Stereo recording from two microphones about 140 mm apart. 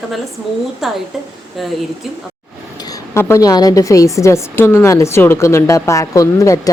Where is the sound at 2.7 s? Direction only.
25° left (ahead or behind).